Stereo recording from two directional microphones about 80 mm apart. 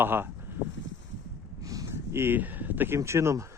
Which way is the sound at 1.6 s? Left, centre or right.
Right.